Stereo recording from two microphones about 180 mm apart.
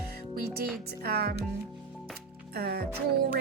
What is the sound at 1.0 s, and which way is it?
Speech, 60° right (ahead or behind).